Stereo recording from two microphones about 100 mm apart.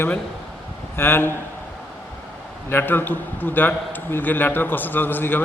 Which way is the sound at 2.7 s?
20° left (ahead or behind).